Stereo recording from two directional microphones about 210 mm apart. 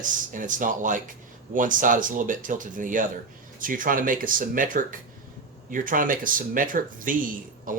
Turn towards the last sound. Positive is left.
turn(degrees=-40)  # may be behind; listen again after turning